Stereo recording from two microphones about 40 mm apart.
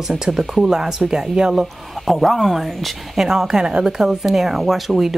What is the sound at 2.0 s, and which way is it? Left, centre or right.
Speech, centre.